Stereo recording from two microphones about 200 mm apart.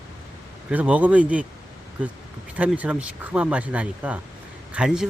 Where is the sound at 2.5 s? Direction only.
5° right (ahead or behind).